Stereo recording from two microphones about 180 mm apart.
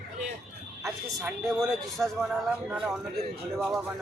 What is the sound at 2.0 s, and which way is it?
A man's voice, 5° right (ahead or behind).